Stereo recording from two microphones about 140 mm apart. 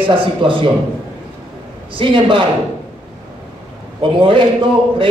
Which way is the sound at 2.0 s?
35° right (ahead or behind).